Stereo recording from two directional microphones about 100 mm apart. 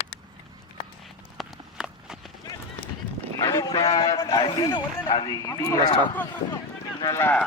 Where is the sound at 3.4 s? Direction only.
35° left (ahead or behind).